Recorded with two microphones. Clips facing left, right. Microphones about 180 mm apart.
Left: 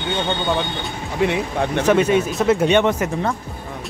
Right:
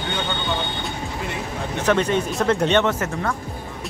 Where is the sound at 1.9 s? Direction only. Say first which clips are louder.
Left 3 dB; 10° left (ahead or behind).